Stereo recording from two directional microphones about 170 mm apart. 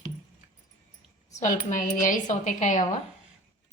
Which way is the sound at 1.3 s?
45° left (ahead or behind).